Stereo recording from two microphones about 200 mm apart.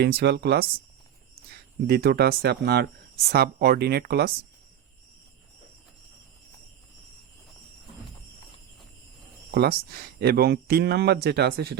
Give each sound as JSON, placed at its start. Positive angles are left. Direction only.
{"t": 0.0, "sound": "speech", "side_deg": -55}
{"t": 1.9, "sound": "speech", "side_deg": -50}
{"t": 9.5, "sound": "speech", "side_deg": -50}